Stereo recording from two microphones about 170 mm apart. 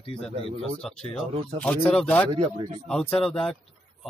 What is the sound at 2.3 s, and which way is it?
Speech, 30° right (ahead or behind).